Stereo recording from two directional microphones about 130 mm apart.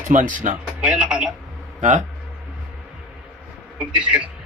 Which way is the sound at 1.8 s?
70° right (ahead or behind).